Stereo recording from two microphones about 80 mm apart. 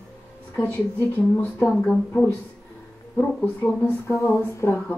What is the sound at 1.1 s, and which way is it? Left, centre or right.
Speech, left.